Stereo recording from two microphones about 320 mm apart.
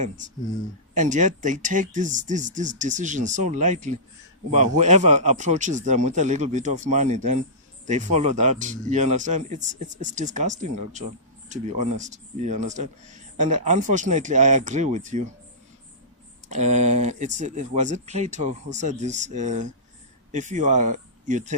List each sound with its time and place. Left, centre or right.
0.9 s speech: right
16.5 s speech: right